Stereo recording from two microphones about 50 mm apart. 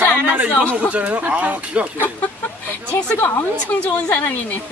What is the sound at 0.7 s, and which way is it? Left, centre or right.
Speech, right.